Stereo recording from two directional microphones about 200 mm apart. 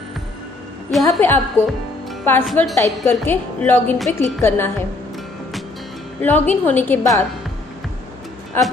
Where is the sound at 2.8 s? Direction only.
10° left (ahead or behind).